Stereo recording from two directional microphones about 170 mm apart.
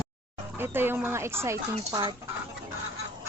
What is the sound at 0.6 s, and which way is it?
Speech, 15° right (ahead or behind).